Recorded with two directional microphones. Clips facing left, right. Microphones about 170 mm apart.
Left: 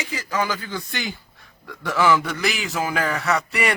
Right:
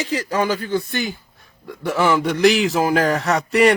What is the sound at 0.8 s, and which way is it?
Speech, 50° right (ahead or behind).